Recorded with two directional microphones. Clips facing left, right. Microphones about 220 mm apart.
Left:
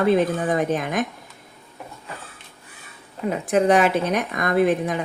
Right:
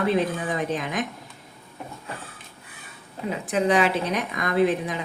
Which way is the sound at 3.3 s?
50° left (ahead or behind).